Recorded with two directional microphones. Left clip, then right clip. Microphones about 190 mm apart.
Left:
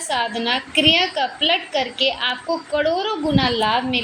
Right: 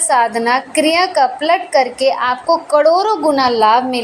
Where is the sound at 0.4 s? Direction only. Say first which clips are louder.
Right 3 dB; 5° left (ahead or behind).